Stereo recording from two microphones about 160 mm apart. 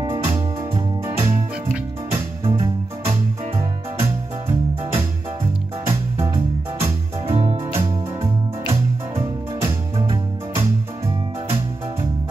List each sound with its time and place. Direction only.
0.0 s music: 20° right (ahead or behind)
2.4 s music: 25° right (ahead or behind)